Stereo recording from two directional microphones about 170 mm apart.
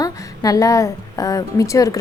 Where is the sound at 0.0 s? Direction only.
20° left (ahead or behind).